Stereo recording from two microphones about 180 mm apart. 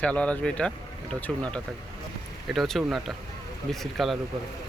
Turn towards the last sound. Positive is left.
turn(degrees=0)  # may be behind; listen again after turning